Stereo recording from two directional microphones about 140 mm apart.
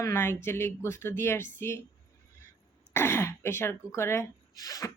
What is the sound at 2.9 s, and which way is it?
Speech, 15° left (ahead or behind).